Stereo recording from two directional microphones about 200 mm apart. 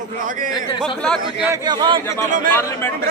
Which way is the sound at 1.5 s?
20° right (ahead or behind).